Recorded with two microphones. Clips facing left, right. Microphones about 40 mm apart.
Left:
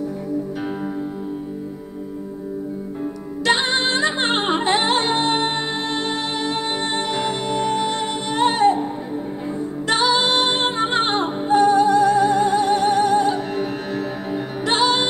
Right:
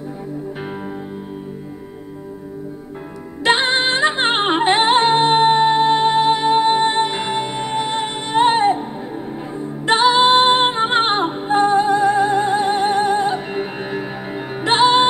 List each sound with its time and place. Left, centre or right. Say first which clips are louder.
3.4 s music: right 3 dB; right
9.8 s music: right 5 dB; right